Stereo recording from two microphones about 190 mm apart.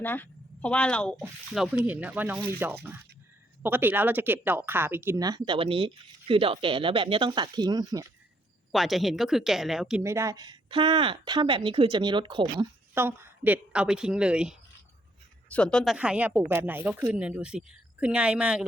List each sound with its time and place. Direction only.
0.0 s speech: 10° left (ahead or behind)
1.7 s speech: 10° right (ahead or behind)
8.7 s a woman's voice: centre (ahead or behind)
10.0 s speech: 15° right (ahead or behind)
12.9 s a woman's voice: 10° right (ahead or behind)
15.4 s a woman's voice: 5° left (ahead or behind)